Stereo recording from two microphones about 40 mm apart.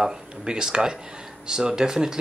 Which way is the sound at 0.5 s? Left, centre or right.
Centre.